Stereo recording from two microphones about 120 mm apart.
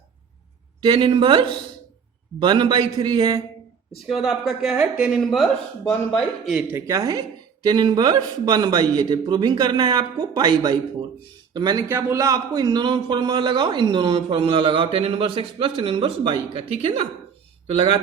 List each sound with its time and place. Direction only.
0.8 s speech: 40° right (ahead or behind)
4.0 s speech: 5° right (ahead or behind)
6.7 s a man's voice: 20° right (ahead or behind); by 18.0 s 55° right (ahead or behind)